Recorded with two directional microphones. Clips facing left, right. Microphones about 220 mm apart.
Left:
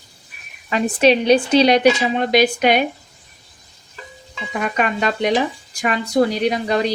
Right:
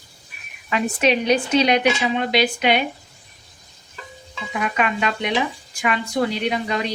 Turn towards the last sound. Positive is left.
turn(degrees=40)  # may be behind; listen again after turning